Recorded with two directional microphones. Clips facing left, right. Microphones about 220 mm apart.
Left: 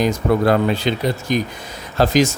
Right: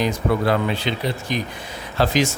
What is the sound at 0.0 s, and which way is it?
Speech, 45° left (ahead or behind).